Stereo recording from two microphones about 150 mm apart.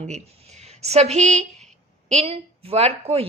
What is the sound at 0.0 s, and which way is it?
A woman's voice, 50° right (ahead or behind).